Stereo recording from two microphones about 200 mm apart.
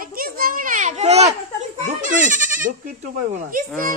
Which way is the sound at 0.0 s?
45° right (ahead or behind).